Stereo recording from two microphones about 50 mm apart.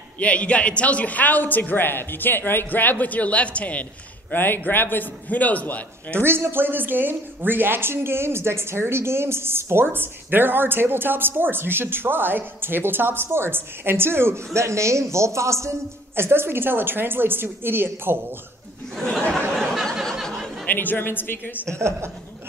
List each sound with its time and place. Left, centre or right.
0.2 s a man's voice: left
4.3 s a man's voice: left
6.1 s speech: right
16.2 s speech: right
19.5 s a sound: centre
20.6 s a man's voice: left
21.6 s a woman's voice: right